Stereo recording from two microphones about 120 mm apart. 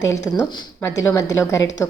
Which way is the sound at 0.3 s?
25° left (ahead or behind).